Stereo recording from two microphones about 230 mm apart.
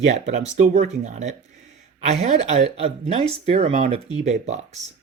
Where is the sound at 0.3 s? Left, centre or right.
Right.